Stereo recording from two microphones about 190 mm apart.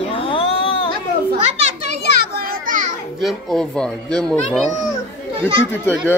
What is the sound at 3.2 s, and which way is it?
A child's voice, 5° left (ahead or behind).